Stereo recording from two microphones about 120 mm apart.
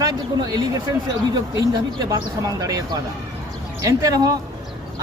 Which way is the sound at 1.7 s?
30° right (ahead or behind).